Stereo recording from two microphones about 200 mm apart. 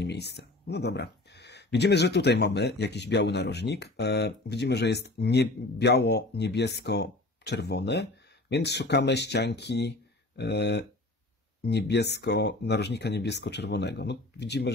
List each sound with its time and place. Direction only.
0.0 s speech: 60° left (ahead or behind)